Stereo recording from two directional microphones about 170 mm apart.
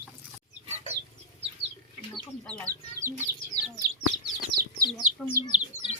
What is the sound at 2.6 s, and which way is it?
Chicken, 15° right (ahead or behind).